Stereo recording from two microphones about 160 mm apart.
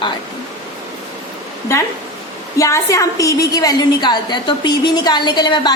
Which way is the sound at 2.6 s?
20° left (ahead or behind).